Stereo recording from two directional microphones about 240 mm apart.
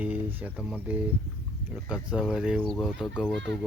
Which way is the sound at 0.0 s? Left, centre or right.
Centre.